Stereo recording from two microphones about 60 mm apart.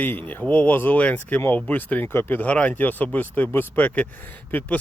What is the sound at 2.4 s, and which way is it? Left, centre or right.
Speech, left.